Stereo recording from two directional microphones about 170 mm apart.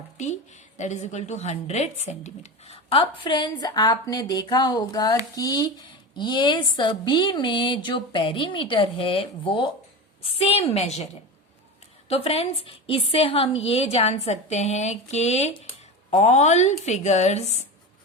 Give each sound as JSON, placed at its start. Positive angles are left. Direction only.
{"t": 0.2, "sound": "a woman's voice", "side_deg": 45}